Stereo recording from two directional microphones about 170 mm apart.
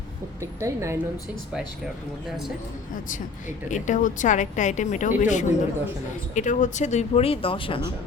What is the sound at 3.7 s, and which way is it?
Speech, 45° left (ahead or behind).